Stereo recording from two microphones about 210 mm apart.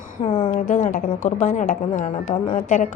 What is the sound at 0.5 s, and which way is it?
A woman's voice, 40° left (ahead or behind).